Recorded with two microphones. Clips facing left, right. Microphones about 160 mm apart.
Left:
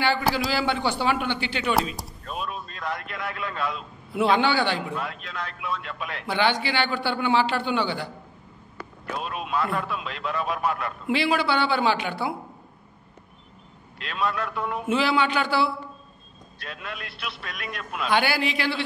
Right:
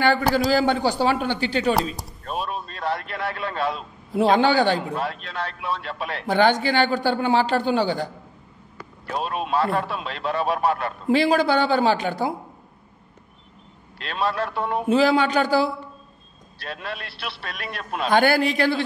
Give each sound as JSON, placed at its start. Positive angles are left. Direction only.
{"t": 0.0, "sound": "a man's voice", "side_deg": -45}
{"t": 9.2, "sound": "a man's voice", "side_deg": -30}
{"t": 13.9, "sound": "a man's voice", "side_deg": -35}